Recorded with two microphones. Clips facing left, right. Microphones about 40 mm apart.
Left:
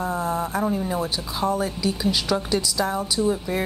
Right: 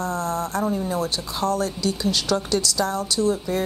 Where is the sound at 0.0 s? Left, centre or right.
Centre.